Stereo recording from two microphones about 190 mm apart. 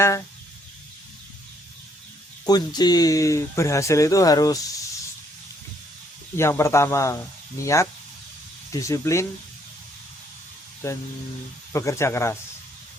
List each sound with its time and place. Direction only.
2.5 s speech: 20° left (ahead or behind)
6.3 s speech: 15° left (ahead or behind)
10.8 s speech: 15° left (ahead or behind)